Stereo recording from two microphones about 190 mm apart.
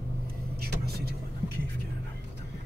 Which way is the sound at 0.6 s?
55° right (ahead or behind).